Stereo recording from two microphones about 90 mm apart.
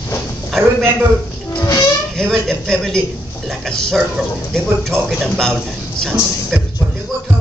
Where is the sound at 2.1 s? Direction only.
5° left (ahead or behind).